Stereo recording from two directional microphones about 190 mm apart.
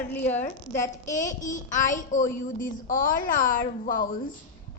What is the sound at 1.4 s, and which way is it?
A child's voice, 40° left (ahead or behind).